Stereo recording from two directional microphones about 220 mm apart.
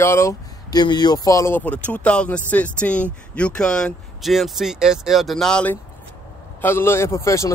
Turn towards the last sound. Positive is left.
turn(degrees=15)  # may be behind; listen again after turning